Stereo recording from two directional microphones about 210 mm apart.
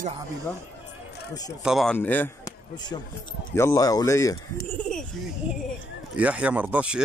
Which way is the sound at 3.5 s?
15° left (ahead or behind).